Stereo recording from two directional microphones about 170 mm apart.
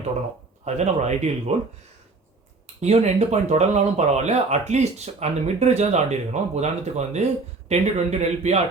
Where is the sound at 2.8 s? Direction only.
40° right (ahead or behind).